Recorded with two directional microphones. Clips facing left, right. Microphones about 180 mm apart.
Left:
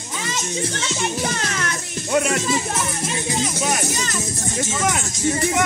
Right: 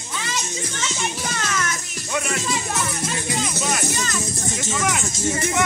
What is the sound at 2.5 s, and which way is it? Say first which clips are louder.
Speech: left 2 dB; 25° left (ahead or behind).